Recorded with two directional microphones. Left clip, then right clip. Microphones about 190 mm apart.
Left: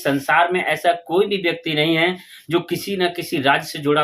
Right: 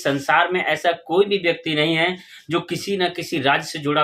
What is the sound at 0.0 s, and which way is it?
Speech, centre (ahead or behind).